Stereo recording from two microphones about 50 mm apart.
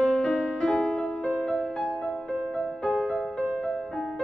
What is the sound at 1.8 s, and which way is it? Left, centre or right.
Music, left.